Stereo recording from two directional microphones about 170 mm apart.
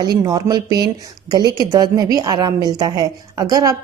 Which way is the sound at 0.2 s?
20° right (ahead or behind).